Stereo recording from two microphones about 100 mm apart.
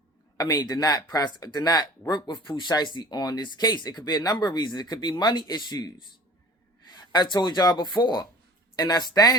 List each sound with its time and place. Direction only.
0.3 s speech: 40° left (ahead or behind)